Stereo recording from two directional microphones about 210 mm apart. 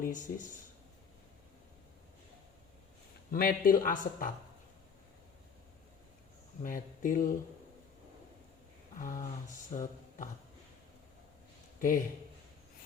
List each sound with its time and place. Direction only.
0.0 s speech: 40° left (ahead or behind)
3.3 s speech: 45° left (ahead or behind)
6.6 s speech: 40° left (ahead or behind)
9.0 s speech: 40° left (ahead or behind)
11.8 s speech: 40° left (ahead or behind)